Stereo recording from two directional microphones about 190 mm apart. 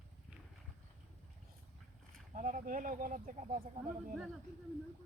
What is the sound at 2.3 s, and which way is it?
Speech, 40° right (ahead or behind).